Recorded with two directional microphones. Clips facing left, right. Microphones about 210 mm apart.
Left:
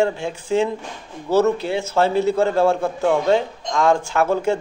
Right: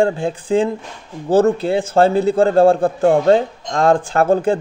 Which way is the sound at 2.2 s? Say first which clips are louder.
Right 4 dB; 30° right (ahead or behind).